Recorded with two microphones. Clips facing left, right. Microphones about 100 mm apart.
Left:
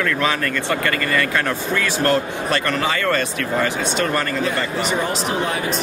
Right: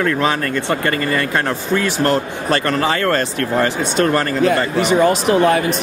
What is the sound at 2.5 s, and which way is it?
A man's voice, 35° right (ahead or behind).